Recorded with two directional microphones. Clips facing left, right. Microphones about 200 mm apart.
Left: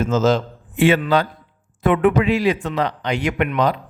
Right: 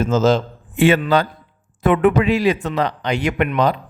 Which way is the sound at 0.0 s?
35° right (ahead or behind).